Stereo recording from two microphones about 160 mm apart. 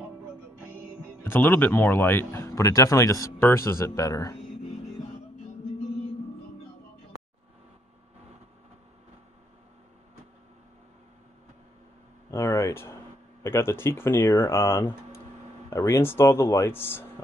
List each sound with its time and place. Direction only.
1.2 s speech: 15° left (ahead or behind)
12.3 s a sound: 20° left (ahead or behind)
13.4 s speech: 15° left (ahead or behind)